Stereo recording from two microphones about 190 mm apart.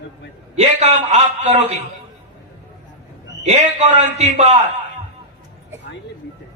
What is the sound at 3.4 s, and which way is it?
A man's voice, 40° right (ahead or behind).